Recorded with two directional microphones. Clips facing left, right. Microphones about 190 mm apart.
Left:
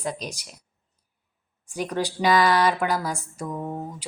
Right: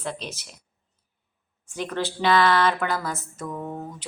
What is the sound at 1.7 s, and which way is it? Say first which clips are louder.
A woman's voice: left 2 dB; 15° left (ahead or behind).